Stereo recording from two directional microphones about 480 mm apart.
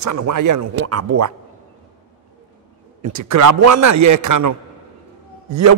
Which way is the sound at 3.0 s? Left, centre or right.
Right.